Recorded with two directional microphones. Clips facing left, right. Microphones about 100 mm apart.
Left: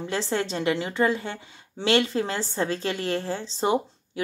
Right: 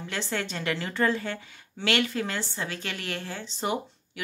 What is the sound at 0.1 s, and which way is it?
A woman's voice, 25° left (ahead or behind).